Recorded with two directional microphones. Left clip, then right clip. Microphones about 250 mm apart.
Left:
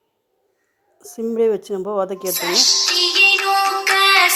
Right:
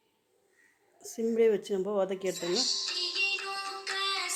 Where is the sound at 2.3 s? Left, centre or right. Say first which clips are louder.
Left 14 dB; left.